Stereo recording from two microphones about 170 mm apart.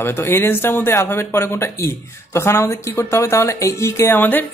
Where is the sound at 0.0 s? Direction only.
15° left (ahead or behind).